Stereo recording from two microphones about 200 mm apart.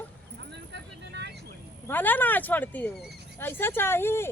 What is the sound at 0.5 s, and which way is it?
Vehicle, 60° right (ahead or behind).